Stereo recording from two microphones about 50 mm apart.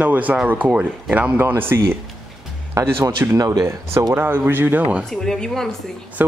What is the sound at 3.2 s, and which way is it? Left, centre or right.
Speech, right.